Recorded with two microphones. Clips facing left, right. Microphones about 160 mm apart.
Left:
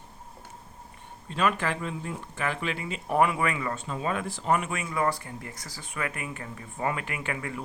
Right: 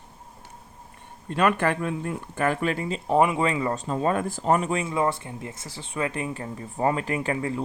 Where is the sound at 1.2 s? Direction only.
55° right (ahead or behind); by 3.0 s 40° right (ahead or behind).